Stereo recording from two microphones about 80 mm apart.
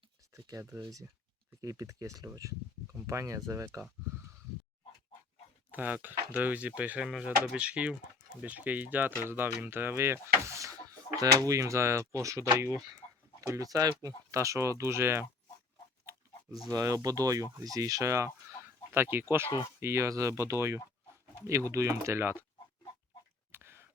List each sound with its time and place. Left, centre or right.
0.4 s speech: right
5.7 s speech: right
16.6 s speech: right
23.5 s a sound: right